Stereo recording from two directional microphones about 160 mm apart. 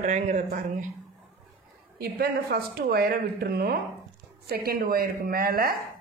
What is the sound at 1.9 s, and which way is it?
Speech, 75° right (ahead or behind).